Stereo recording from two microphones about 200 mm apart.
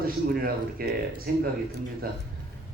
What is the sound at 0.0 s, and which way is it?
Speech, 45° right (ahead or behind).